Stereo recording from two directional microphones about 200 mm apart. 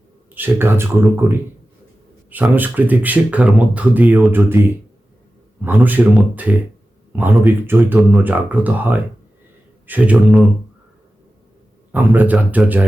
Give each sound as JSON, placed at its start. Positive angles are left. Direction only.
{"t": 0.3, "sound": "speech", "side_deg": -10}
{"t": 11.9, "sound": "speech", "side_deg": -10}